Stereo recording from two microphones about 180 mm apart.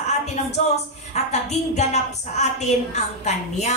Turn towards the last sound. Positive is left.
turn(degrees=40)  # may be behind; listen again after turning